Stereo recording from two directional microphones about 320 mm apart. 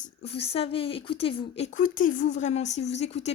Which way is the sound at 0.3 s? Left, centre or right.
Centre.